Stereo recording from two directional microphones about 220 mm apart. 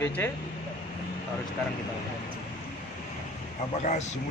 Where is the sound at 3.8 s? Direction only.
30° left (ahead or behind).